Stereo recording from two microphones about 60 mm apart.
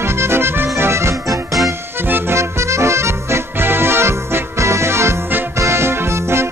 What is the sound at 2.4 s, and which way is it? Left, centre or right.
Music, right.